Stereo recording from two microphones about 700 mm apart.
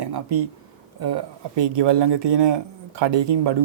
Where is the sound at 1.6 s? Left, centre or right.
Right.